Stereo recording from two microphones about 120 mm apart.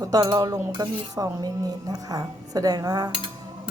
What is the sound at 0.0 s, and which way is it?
Music, 30° right (ahead or behind).